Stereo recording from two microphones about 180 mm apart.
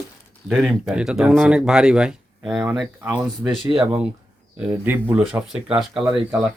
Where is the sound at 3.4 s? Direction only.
30° right (ahead or behind).